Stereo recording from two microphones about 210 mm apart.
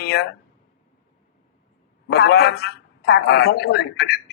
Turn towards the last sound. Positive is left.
turn(degrees=50)  # may be behind; listen again after turning